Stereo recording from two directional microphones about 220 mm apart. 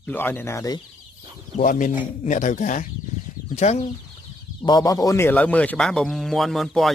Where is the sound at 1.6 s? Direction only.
40° left (ahead or behind).